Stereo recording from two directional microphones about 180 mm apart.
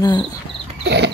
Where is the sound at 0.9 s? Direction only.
70° right (ahead or behind).